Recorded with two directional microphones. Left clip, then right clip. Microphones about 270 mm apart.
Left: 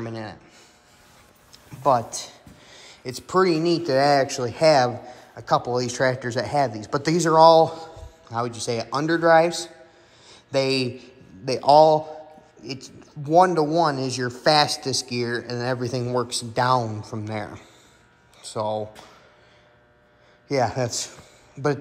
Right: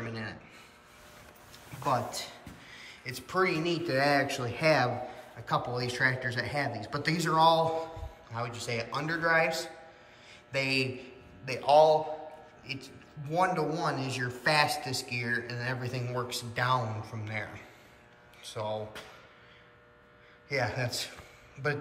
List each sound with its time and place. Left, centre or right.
0.0 s a sound: centre
1.5 s a man's voice: centre
20.4 s a man's voice: centre